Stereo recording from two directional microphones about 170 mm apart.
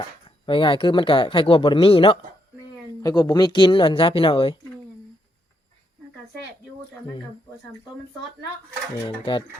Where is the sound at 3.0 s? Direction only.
20° left (ahead or behind).